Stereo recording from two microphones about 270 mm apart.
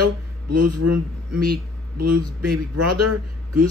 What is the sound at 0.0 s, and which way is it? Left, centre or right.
A man's voice, right.